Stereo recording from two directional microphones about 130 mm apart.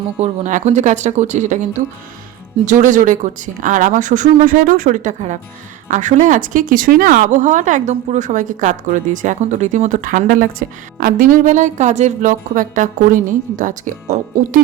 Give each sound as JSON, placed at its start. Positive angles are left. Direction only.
{"t": 0.2, "sound": "speech", "side_deg": -65}
{"t": 2.6, "sound": "speech", "side_deg": -75}